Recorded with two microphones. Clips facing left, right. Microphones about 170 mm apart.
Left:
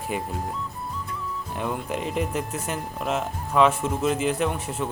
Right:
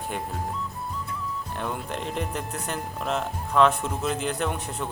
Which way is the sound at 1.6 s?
5° left (ahead or behind).